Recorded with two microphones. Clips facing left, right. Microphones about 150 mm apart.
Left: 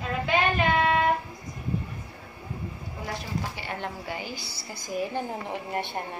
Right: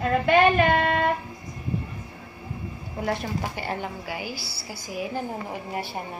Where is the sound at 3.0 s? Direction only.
50° right (ahead or behind).